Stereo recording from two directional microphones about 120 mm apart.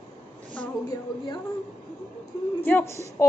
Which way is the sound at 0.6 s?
10° left (ahead or behind).